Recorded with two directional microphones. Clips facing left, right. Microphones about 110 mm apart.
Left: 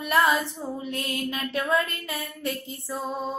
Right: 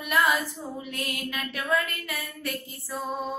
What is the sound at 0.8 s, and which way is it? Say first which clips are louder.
Speech: left 4 dB; 30° left (ahead or behind).